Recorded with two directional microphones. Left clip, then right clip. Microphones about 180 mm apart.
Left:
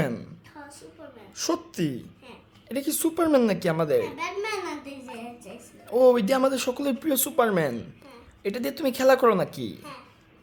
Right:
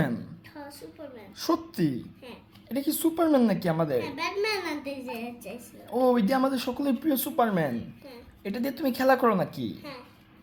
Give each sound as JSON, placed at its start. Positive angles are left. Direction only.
{"t": 1.4, "sound": "a woman's voice", "side_deg": 20}